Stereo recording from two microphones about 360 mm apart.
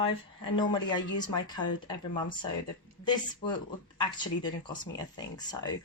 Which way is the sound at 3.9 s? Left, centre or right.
Centre.